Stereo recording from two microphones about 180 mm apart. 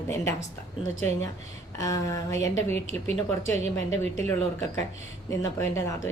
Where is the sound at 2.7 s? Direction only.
40° right (ahead or behind).